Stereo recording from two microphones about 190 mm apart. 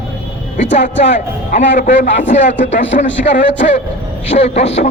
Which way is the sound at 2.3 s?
35° left (ahead or behind).